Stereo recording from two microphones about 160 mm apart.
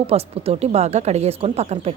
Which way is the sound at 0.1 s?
40° right (ahead or behind).